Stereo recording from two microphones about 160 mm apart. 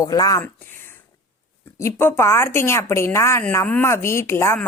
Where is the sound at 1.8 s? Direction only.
15° left (ahead or behind).